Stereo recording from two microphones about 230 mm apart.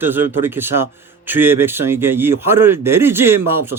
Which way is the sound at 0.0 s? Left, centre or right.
Centre.